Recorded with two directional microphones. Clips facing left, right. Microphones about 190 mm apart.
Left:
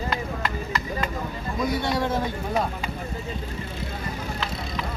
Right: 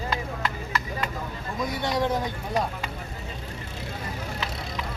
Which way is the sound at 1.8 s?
15° right (ahead or behind).